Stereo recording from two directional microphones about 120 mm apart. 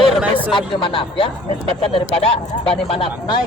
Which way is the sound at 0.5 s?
45° left (ahead or behind).